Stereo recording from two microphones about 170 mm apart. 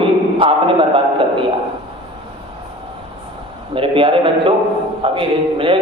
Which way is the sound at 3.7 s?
30° right (ahead or behind).